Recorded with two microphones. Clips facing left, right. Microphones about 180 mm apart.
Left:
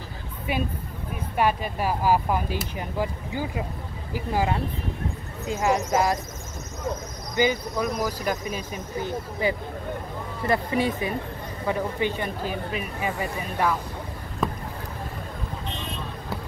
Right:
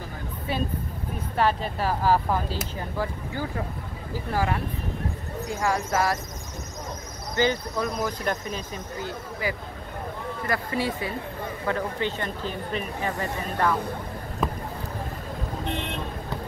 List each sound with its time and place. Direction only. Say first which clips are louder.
0.5 s speech: left 1 dB; 15° left (ahead or behind)
7.3 s speech: left 1 dB; 10° left (ahead or behind)
9.4 s speech: left 5 dB; 25° left (ahead or behind); by 13.7 s 10° left (ahead or behind)